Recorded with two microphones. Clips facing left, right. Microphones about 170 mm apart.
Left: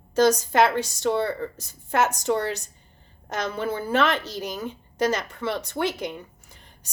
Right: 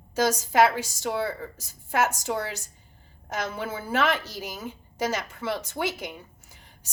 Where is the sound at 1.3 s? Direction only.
65° left (ahead or behind).